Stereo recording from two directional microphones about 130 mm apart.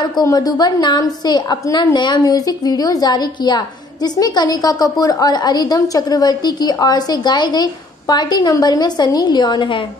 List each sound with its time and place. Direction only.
0.0 s a woman's voice: 30° left (ahead or behind)